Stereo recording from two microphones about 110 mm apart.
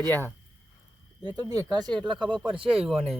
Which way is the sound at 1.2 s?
40° right (ahead or behind).